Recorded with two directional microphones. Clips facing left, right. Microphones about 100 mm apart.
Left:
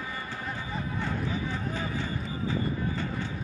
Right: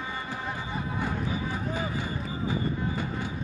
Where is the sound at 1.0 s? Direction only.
15° right (ahead or behind).